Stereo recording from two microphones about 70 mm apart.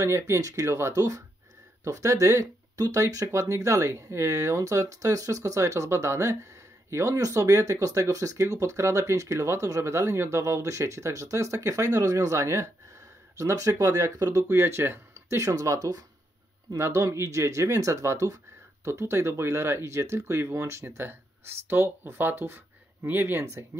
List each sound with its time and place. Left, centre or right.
0.0 s speech: right
14.5 s speech: right
16.7 s speech: right
18.9 s speech: right
23.4 s speech: right